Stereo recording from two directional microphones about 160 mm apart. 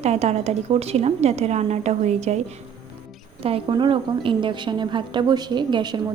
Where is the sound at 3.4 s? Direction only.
35° right (ahead or behind).